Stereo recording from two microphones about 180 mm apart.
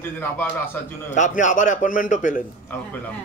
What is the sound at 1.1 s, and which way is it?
A man's voice, 45° left (ahead or behind).